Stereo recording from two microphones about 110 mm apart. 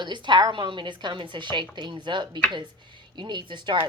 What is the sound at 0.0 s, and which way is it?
A woman's voice, 45° right (ahead or behind).